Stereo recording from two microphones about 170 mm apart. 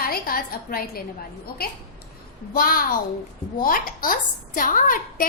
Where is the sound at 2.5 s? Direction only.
60° left (ahead or behind).